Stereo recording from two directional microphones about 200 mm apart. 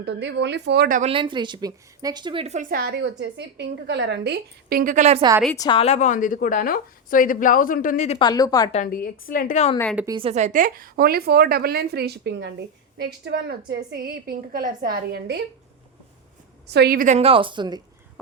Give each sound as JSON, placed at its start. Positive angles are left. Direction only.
{"t": 0.0, "sound": "speech", "side_deg": -60}
{"t": 1.1, "sound": "a woman's voice", "side_deg": -25}
{"t": 5.5, "sound": "a woman's voice", "side_deg": 25}
{"t": 8.2, "sound": "speech", "side_deg": 20}
{"t": 8.7, "sound": "a woman's voice", "side_deg": 40}
{"t": 10.1, "sound": "a woman's voice", "side_deg": -30}
{"t": 16.6, "sound": "speech", "side_deg": -55}
{"t": 17.1, "sound": "speech", "side_deg": -30}